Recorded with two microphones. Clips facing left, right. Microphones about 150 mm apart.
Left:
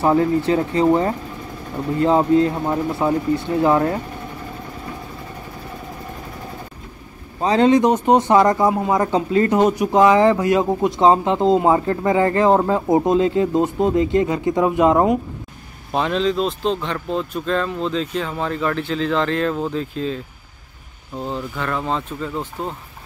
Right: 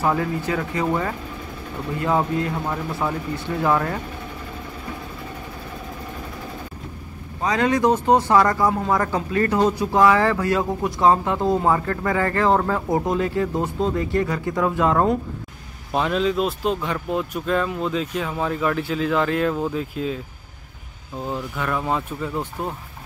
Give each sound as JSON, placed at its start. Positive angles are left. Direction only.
{"t": 0.0, "sound": "speech", "side_deg": 25}
{"t": 7.4, "sound": "speech", "side_deg": 25}
{"t": 15.9, "sound": "speech", "side_deg": -5}
{"t": 21.3, "sound": "speech", "side_deg": -10}